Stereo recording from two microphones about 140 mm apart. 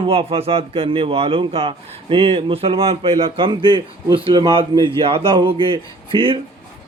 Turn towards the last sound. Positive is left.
turn(degrees=-40)  # may be behind; listen again after turning